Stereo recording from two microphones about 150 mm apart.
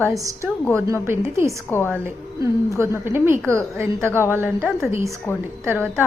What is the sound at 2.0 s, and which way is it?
A woman's voice, 20° right (ahead or behind).